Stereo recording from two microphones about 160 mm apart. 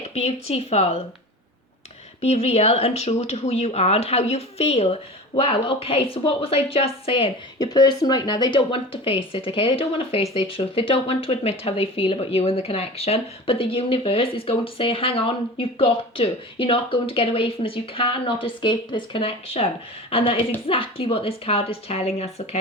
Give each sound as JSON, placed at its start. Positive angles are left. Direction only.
{"t": 0.0, "sound": "speech", "side_deg": 40}
{"t": 2.2, "sound": "speech", "side_deg": 40}
{"t": 7.6, "sound": "speech", "side_deg": 25}